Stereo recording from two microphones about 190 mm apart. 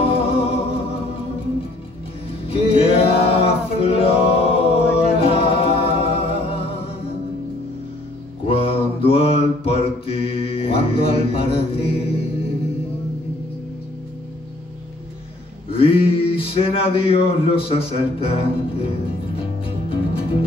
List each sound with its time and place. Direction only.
0.0 s music: 30° left (ahead or behind)
2.4 s music: 30° left (ahead or behind)
8.5 s mantra: 30° left (ahead or behind)
15.7 s a sound: 30° left (ahead or behind)
19.9 s music: 30° left (ahead or behind)